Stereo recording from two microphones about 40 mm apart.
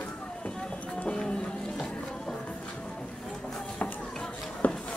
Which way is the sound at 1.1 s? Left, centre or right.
Left.